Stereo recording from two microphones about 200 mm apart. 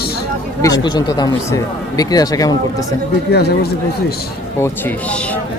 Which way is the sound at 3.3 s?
50° left (ahead or behind).